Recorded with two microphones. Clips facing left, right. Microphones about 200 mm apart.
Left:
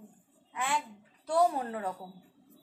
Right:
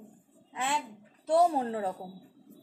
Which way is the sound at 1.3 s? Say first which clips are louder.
Right 3 dB; 25° right (ahead or behind).